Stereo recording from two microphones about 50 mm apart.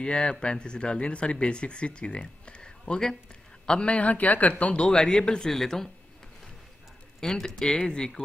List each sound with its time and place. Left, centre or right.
0.0 s a man's voice: centre
3.9 s speech: left
4.8 s speech: centre
7.2 s speech: centre